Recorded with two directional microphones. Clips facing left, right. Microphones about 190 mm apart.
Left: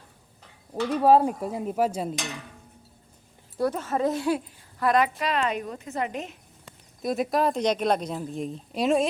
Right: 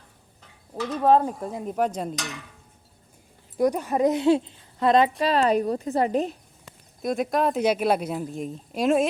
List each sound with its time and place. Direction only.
0.9 s speech: 10° left (ahead or behind)
3.6 s speech: 15° right (ahead or behind); by 6.3 s 35° right (ahead or behind)
7.0 s speech: centre (ahead or behind)